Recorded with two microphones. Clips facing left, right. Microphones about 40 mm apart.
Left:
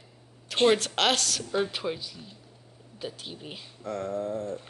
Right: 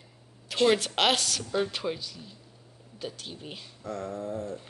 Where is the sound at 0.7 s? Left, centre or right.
Centre.